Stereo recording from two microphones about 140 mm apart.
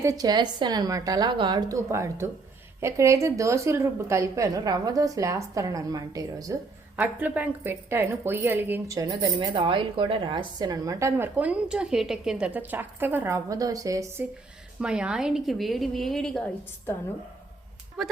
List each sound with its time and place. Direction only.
0.0 s a woman's voice: 25° right (ahead or behind)
6.9 s speech: 10° right (ahead or behind)
14.8 s a woman's voice: 5° right (ahead or behind)
18.0 s a woman's voice: centre (ahead or behind)